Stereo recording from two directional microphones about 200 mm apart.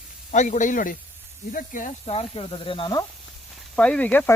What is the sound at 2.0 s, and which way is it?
Speech, 25° left (ahead or behind).